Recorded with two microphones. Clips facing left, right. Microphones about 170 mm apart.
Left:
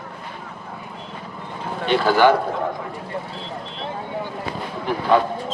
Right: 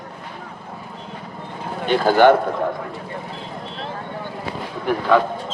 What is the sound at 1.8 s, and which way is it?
Speech, 45° right (ahead or behind).